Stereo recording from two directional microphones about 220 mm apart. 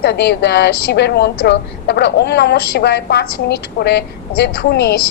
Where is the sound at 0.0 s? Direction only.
50° left (ahead or behind).